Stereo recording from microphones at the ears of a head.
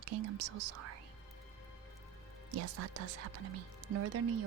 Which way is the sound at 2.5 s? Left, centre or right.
Right.